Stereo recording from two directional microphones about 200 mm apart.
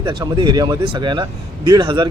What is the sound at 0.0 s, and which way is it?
Speech, 20° right (ahead or behind).